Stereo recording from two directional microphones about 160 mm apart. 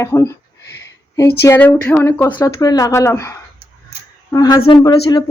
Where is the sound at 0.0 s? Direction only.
20° left (ahead or behind).